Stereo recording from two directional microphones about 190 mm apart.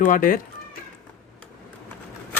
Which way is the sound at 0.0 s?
45° left (ahead or behind).